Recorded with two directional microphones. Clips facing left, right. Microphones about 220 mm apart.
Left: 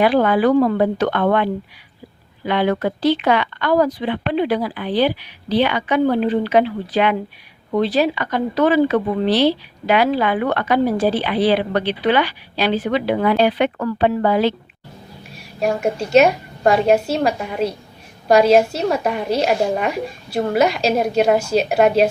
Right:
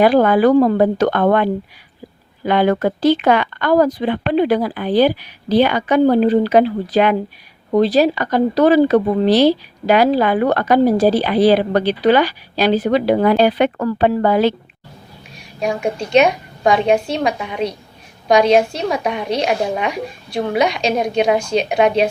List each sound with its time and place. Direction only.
0.0 s speech: 45° right (ahead or behind)
15.6 s a woman's voice: 5° left (ahead or behind)